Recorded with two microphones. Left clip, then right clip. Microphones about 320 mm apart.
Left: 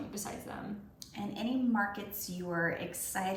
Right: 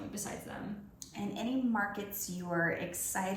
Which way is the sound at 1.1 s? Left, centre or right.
Centre.